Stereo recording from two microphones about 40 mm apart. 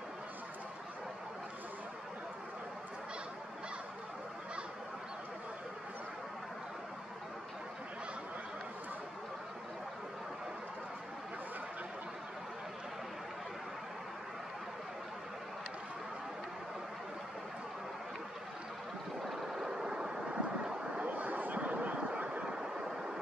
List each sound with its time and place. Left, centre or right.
19.2 s vehicle: centre
19.7 s vehicle: centre
21.0 s a sound: right
22.4 s vehicle: centre